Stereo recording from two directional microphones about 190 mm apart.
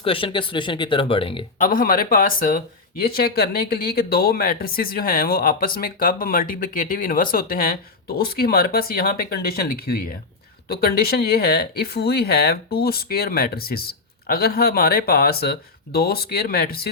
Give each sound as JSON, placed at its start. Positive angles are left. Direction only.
{"t": 0.0, "sound": "speech", "side_deg": 30}
{"t": 1.6, "sound": "speech", "side_deg": 50}